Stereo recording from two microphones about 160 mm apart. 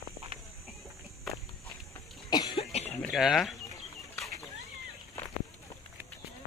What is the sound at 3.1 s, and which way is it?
Speech, centre (ahead or behind).